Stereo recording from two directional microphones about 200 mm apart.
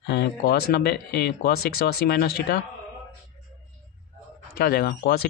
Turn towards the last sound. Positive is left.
turn(degrees=50)  # may be behind; listen again after turning